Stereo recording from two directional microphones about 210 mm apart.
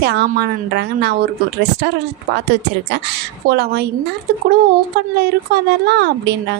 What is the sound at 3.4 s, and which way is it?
Speech, 50° right (ahead or behind).